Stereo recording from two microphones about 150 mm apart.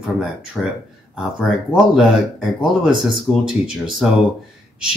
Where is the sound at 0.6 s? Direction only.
Centre (ahead or behind).